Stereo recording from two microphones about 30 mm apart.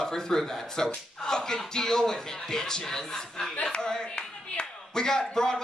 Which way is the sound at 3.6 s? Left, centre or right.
Left.